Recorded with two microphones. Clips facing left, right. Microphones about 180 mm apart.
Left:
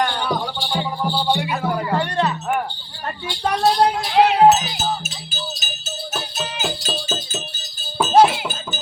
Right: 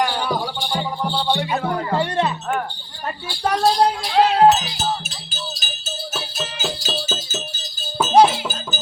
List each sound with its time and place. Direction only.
0.0 s music: 5° right (ahead or behind)
0.7 s music: 10° left (ahead or behind)
2.0 s music: 20° right (ahead or behind)
3.2 s speech: centre (ahead or behind)
6.1 s music: centre (ahead or behind)
8.4 s a sound: centre (ahead or behind)